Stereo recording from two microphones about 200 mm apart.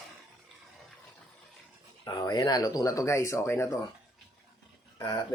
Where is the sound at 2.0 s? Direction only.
20° left (ahead or behind).